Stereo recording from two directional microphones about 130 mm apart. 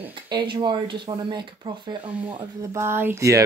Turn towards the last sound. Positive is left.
turn(degrees=-25)  # may be behind; listen again after turning